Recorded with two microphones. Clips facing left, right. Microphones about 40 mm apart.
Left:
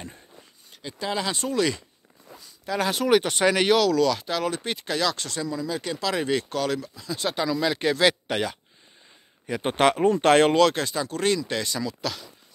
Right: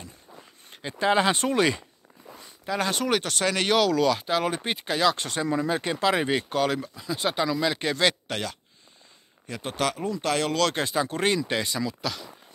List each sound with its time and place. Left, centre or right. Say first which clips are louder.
0.7 s speech: right 6 dB; right
2.6 s speech: left 2 dB; centre
3.7 s speech: left 1 dB; centre
5.1 s speech: right 3 dB; right
5.8 s speech: right 3 dB; right; by 8.5 s centre
9.6 s speech: left 7 dB; left
10.7 s speech: right 1 dB; centre